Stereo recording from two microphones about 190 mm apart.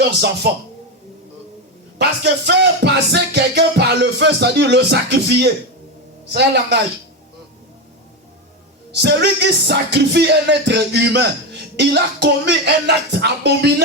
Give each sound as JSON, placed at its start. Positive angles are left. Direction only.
{"t": 0.4, "sound": "music", "side_deg": -55}
{"t": 2.0, "sound": "music", "side_deg": -60}
{"t": 9.0, "sound": "music", "side_deg": -60}